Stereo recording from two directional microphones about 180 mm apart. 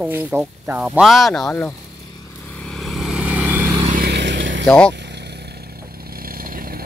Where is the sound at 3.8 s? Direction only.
45° right (ahead or behind).